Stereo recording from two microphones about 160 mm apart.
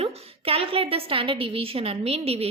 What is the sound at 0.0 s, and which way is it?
A woman's voice, 35° right (ahead or behind).